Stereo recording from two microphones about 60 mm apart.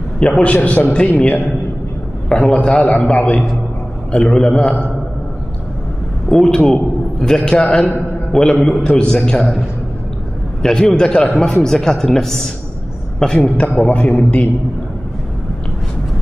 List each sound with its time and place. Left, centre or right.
0.2 s a man's voice: left
2.2 s a man's voice: centre
6.2 s a man's voice: centre
10.6 s a man's voice: centre
13.7 s a man's voice: left